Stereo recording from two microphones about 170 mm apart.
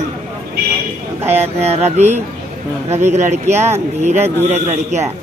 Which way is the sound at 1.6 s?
40° right (ahead or behind).